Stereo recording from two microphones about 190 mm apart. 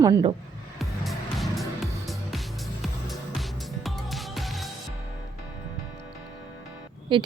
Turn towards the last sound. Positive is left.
turn(degrees=-25)  # may be behind; listen again after turning